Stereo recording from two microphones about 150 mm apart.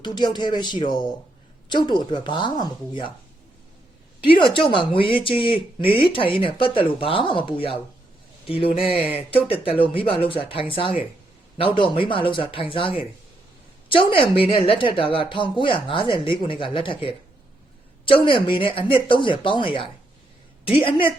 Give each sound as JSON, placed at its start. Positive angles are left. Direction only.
{"t": 0.0, "sound": "a woman's voice", "side_deg": 30}
{"t": 4.3, "sound": "a woman's voice", "side_deg": 35}